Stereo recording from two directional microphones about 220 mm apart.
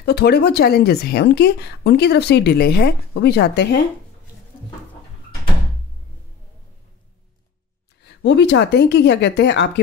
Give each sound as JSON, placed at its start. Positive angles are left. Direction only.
{"t": 0.0, "sound": "a woman's voice", "side_deg": 45}
{"t": 8.0, "sound": "a woman's voice", "side_deg": 50}